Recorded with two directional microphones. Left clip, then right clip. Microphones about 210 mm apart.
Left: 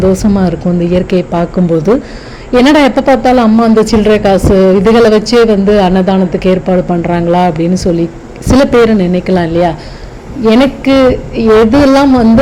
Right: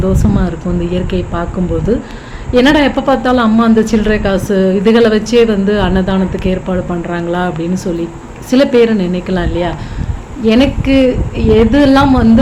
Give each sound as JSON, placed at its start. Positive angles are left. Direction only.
{"t": 0.1, "sound": "speech", "side_deg": 30}